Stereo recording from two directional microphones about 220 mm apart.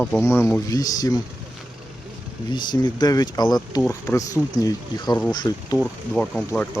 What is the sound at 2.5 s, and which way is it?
Speech, 20° left (ahead or behind).